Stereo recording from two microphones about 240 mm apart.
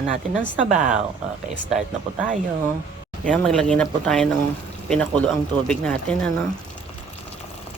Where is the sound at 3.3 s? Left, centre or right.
Centre.